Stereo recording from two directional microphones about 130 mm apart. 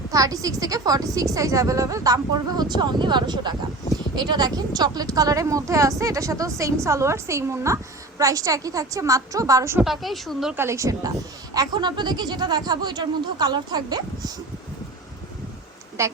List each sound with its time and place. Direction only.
0.1 s a woman's voice: 25° right (ahead or behind)
9.8 s a woman's voice: centre (ahead or behind)
10.5 s a woman's voice: 20° right (ahead or behind)
16.0 s a woman's voice: 20° right (ahead or behind)